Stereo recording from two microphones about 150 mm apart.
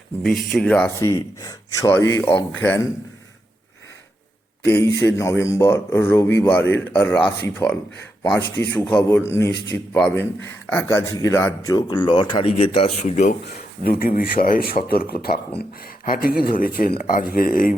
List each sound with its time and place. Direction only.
0.2 s speech: centre (ahead or behind)
0.9 s a man's voice: 20° left (ahead or behind)
4.6 s a man's voice: 15° left (ahead or behind); by 13.3 s 50° left (ahead or behind)
13.6 s speech: 85° left
15.8 s speech: 75° left (ahead or behind)